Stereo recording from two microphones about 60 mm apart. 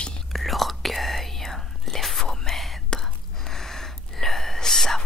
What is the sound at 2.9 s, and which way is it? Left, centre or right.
Gasp, centre.